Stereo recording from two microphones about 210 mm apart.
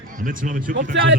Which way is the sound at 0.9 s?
60° right (ahead or behind).